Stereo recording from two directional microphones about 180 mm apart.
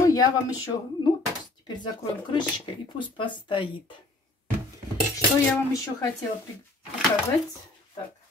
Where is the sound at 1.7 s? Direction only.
25° left (ahead or behind).